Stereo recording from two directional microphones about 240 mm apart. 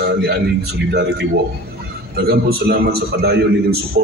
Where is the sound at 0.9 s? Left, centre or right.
Right.